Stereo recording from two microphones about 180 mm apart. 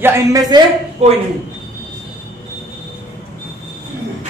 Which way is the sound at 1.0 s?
35° right (ahead or behind).